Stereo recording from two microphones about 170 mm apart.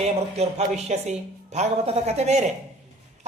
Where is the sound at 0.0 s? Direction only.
40° right (ahead or behind).